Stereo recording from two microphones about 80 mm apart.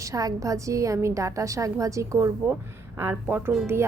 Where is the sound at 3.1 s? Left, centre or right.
Right.